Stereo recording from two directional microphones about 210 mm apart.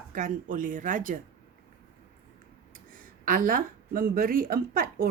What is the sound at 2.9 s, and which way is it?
A woman's voice, 40° right (ahead or behind).